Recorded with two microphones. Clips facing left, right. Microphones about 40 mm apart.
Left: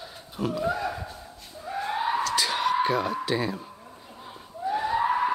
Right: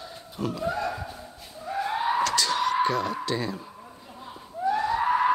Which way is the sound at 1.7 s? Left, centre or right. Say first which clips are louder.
Right 1 dB; centre.